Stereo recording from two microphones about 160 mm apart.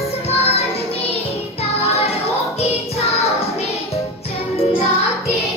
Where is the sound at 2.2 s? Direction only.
40° left (ahead or behind).